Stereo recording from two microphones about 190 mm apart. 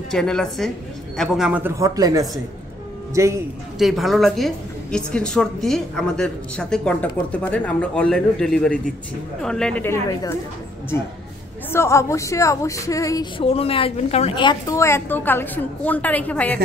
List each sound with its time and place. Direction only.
0.1 s a woman's voice: centre (ahead or behind); by 3.4 s 15° right (ahead or behind)
3.7 s a woman's voice: centre (ahead or behind)
11.7 s speech: 15° left (ahead or behind)